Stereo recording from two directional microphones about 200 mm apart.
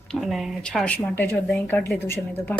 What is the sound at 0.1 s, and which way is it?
Speech, centre (ahead or behind).